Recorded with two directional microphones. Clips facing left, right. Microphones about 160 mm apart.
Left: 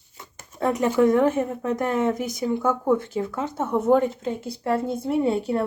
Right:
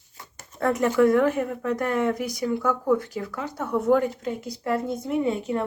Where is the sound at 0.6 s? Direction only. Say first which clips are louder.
Even; 20° left (ahead or behind).